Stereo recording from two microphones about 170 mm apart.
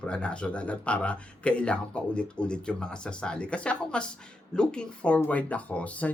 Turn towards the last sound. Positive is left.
turn(degrees=10)  # may be behind; listen again after turning